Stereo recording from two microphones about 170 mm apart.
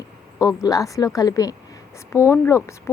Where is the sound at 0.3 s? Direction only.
20° left (ahead or behind).